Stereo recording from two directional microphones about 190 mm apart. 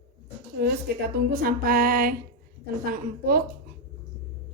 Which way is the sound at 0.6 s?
60° right (ahead or behind).